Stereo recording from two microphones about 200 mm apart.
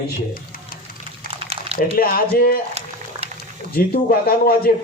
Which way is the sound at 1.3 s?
30° right (ahead or behind).